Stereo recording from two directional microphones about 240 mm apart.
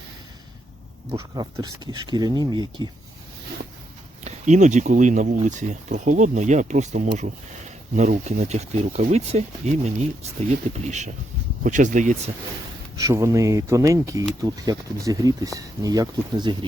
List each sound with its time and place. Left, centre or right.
1.2 s speech: centre
4.2 s speech: right
13.0 s speech: centre